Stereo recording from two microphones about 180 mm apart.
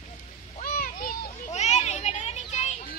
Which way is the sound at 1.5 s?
35° left (ahead or behind).